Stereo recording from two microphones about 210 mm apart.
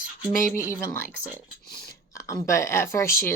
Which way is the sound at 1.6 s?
50° left (ahead or behind).